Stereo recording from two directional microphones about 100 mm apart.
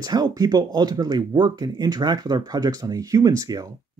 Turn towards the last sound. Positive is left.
turn(degrees=-35)  # may be behind; listen again after turning